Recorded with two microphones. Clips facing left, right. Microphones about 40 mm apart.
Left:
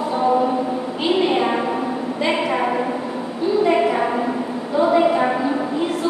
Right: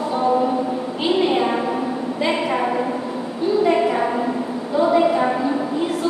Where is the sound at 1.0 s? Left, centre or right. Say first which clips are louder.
Even; centre.